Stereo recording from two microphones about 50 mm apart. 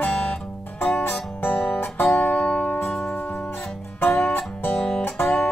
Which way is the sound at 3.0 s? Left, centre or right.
Left.